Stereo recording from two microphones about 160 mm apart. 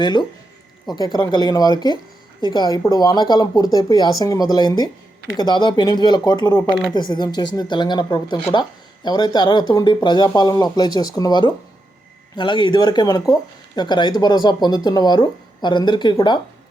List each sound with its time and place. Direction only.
0.0 s speech: 25° left (ahead or behind)